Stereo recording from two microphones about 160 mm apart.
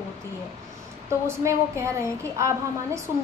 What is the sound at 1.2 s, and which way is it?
A woman's voice, 15° right (ahead or behind).